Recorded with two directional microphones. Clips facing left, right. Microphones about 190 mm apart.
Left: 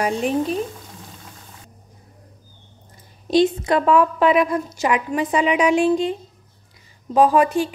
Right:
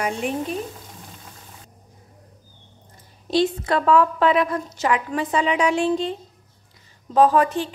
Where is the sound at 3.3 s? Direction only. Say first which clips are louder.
Left 4 dB; 15° left (ahead or behind).